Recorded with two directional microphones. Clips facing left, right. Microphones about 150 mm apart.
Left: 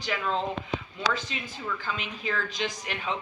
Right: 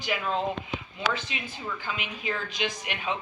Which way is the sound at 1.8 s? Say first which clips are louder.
Even; 10° right (ahead or behind).